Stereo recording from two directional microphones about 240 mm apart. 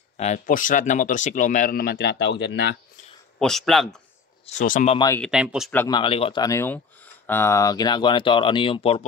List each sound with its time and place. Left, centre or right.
0.2 s speech: left
3.3 s speech: centre
4.5 s speech: left
4.9 s speech: centre
5.2 s speech: centre
5.7 s speech: centre